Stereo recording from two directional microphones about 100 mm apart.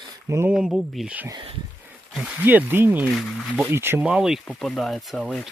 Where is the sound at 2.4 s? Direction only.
20° right (ahead or behind).